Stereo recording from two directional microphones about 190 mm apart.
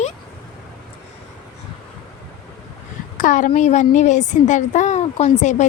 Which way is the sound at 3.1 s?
45° left (ahead or behind).